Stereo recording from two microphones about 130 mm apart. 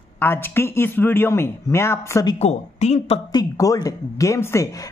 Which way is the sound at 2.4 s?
60° left (ahead or behind).